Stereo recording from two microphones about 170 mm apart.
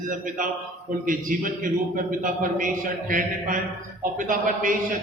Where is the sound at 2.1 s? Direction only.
50° right (ahead or behind).